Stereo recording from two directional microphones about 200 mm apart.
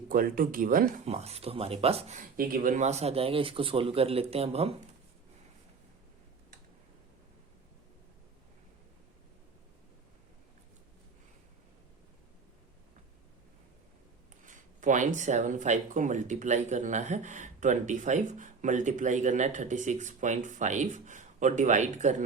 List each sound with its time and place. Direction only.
0.1 s speech: 45° right (ahead or behind)
14.4 s speech: 40° right (ahead or behind)